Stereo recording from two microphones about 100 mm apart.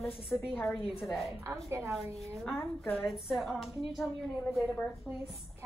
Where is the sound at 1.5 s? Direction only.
30° right (ahead or behind).